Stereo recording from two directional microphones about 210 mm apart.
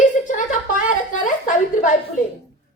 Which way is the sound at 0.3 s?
40° left (ahead or behind).